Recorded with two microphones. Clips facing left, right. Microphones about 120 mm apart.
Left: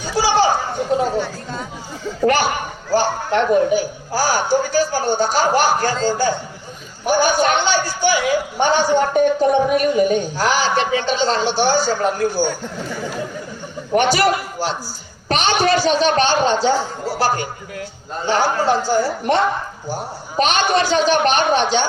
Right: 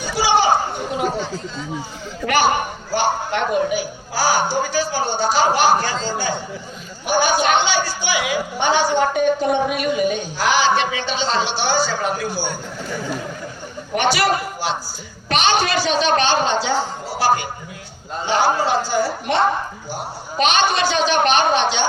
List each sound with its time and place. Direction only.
0.2 s a sound: 40° left (ahead or behind)
2.9 s a man's voice: 40° left (ahead or behind)
13.9 s a man's voice: 45° left (ahead or behind)
20.4 s a woman's voice: 45° left (ahead or behind)